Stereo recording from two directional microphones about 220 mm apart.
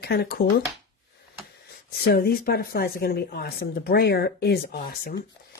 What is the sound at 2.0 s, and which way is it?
Speech, 45° left (ahead or behind).